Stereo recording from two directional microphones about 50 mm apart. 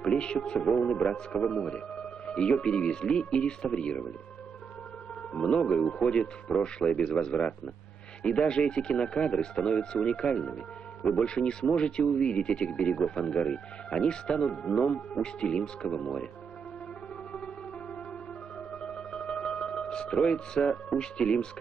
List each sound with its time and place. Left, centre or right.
0.0 s speech: centre
5.3 s speech: centre
18.7 s music: centre